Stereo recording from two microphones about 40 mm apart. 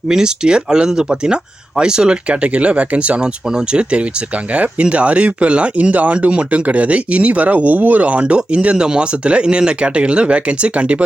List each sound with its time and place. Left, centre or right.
0.1 s speech: centre
2.3 s speech: right
8.7 s speech: right